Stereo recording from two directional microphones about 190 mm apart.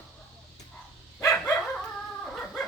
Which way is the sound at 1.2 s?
15° left (ahead or behind).